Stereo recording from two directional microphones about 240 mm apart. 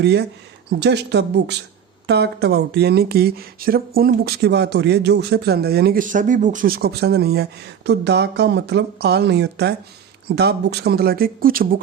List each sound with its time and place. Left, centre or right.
0.0 s speech: right